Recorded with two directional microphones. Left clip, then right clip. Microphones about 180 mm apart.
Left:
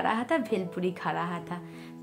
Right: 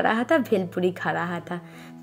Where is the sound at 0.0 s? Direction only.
25° right (ahead or behind).